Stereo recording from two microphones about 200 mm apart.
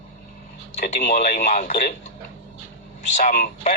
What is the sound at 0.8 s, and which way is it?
Speech, 45° left (ahead or behind).